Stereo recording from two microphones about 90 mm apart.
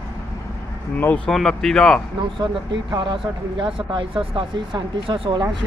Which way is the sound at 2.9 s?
60° right (ahead or behind).